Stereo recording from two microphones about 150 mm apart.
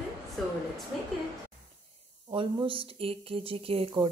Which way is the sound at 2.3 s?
35° right (ahead or behind).